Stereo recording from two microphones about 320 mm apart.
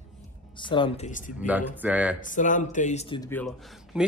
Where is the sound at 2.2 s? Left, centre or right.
Left; by 4.1 s centre.